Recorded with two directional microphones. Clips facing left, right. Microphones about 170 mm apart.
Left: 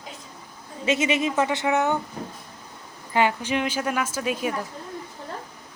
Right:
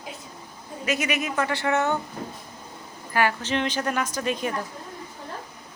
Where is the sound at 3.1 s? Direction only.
15° left (ahead or behind).